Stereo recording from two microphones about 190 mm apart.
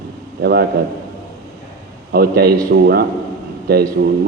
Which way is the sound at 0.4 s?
60° right (ahead or behind).